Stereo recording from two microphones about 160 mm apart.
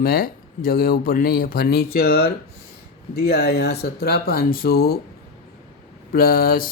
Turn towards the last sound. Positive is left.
turn(degrees=65)  # may be behind; listen again after turning